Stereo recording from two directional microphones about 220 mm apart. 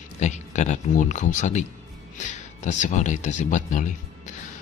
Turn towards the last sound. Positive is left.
turn(degrees=35)  # may be behind; listen again after turning